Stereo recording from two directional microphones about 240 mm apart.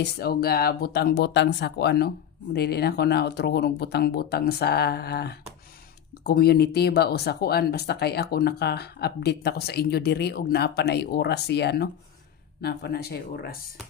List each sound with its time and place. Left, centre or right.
0.0 s speech: left